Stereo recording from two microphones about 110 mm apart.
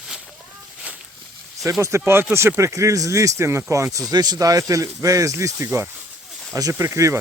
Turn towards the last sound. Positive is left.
turn(degrees=-25)  # may be behind; listen again after turning